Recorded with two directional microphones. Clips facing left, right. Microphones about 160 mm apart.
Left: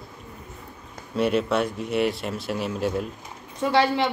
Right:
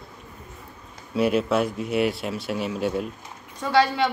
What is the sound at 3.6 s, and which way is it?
Speech, 25° left (ahead or behind).